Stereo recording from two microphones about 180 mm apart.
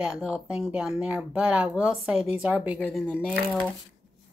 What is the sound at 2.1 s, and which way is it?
Speech, 35° left (ahead or behind).